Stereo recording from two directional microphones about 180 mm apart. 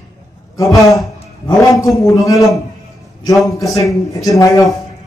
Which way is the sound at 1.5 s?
20° left (ahead or behind).